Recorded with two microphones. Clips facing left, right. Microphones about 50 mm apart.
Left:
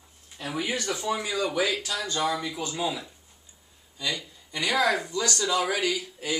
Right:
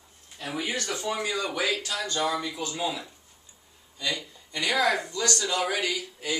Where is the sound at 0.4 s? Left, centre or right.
Centre.